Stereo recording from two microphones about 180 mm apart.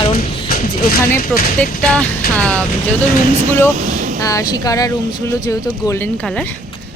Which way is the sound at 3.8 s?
45° right (ahead or behind).